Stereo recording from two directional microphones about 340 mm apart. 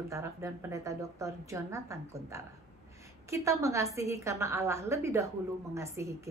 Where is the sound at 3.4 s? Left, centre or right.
Centre.